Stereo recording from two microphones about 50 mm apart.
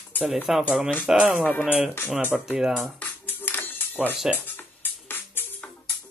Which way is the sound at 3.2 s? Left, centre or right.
Left.